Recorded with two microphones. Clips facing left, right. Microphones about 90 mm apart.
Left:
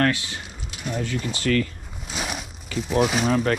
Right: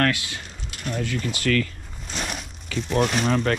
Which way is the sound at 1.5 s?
65° right (ahead or behind).